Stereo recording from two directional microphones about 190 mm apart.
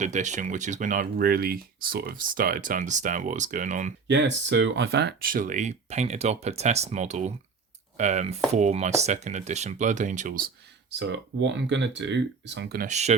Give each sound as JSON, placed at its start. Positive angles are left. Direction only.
{"t": 0.0, "sound": "speech", "side_deg": -40}
{"t": 4.1, "sound": "speech", "side_deg": -70}
{"t": 11.0, "sound": "speech", "side_deg": -65}
{"t": 12.9, "sound": "speech", "side_deg": -35}